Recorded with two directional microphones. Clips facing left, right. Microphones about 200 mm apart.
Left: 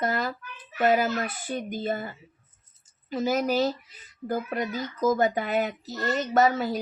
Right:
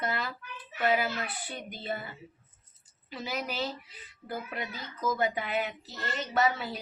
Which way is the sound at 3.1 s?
45° left (ahead or behind).